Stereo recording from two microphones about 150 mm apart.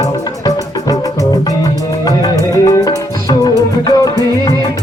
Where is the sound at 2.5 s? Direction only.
25° left (ahead or behind).